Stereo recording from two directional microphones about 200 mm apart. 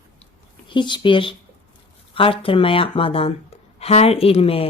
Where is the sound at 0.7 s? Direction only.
25° left (ahead or behind).